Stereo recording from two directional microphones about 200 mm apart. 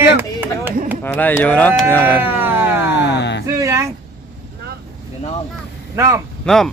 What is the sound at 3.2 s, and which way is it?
Speech, 60° left (ahead or behind).